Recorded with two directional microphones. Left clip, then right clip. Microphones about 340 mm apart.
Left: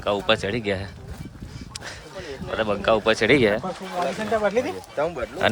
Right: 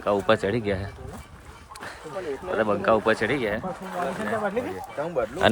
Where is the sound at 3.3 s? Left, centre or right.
Left.